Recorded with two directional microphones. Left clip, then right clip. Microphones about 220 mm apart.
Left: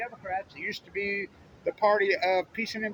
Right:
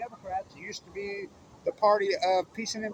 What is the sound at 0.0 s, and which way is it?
Speech, 10° left (ahead or behind).